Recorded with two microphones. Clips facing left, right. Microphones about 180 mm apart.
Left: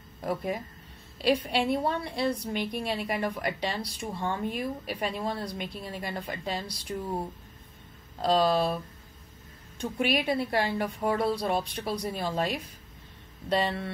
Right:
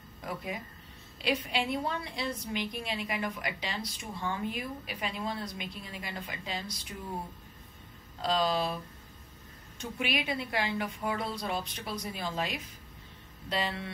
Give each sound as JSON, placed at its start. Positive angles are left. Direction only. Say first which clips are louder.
{"t": 0.2, "sound": "a woman's voice", "louder": "left 7 dB", "side_deg": 35}
{"t": 8.2, "sound": "a woman's voice", "louder": "left 5 dB", "side_deg": 40}
{"t": 9.8, "sound": "a woman's voice", "louder": "left 6 dB", "side_deg": 40}